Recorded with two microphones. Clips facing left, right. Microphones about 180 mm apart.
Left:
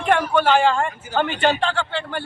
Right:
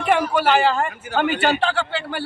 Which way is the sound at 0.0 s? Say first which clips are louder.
Even; 5° right (ahead or behind).